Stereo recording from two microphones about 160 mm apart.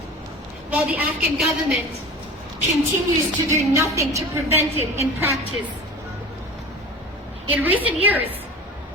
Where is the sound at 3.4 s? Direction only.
20° right (ahead or behind).